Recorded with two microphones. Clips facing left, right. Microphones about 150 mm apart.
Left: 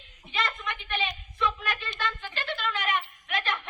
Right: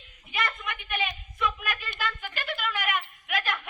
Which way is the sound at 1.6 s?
25° left (ahead or behind).